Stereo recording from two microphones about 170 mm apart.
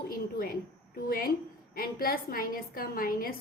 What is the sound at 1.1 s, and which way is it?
A woman's voice, 60° left (ahead or behind).